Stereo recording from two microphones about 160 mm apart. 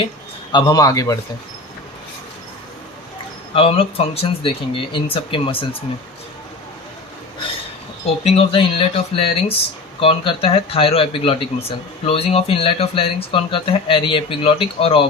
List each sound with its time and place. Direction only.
0.5 s a man's voice: 20° left (ahead or behind)
3.5 s speech: 35° left (ahead or behind)
8.0 s speech: 40° left (ahead or behind)